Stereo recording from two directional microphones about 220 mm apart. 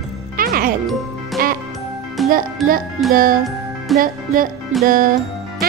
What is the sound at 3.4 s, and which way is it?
Music, centre (ahead or behind).